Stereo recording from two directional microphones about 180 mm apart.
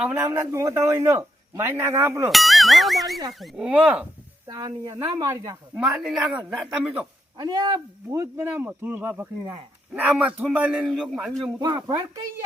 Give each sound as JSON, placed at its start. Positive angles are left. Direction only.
{"t": 0.0, "sound": "speech", "side_deg": -10}
{"t": 2.3, "sound": "a man's voice", "side_deg": 0}
{"t": 4.4, "sound": "speech", "side_deg": -20}
{"t": 5.8, "sound": "a man's voice", "side_deg": -5}
{"t": 7.3, "sound": "speech", "side_deg": -20}
{"t": 11.9, "sound": "speech", "side_deg": -20}